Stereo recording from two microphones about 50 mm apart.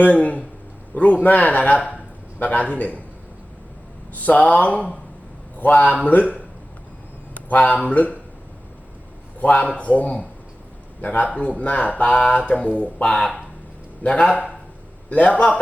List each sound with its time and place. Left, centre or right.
0.0 s a man's voice: left
4.1 s a man's voice: left
7.3 s speech: left
9.4 s speech: left
12.5 s speech: left